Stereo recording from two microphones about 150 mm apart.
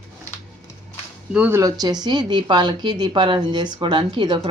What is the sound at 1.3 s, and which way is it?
Speech, 10° right (ahead or behind).